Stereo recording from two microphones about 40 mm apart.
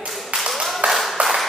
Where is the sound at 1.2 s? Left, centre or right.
Right.